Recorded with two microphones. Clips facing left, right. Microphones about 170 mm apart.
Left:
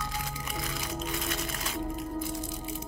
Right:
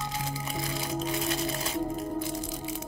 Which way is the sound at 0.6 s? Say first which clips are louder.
Right 4 dB; 30° right (ahead or behind).